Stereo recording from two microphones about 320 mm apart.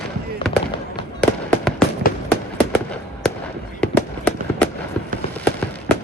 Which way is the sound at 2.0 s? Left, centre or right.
Left.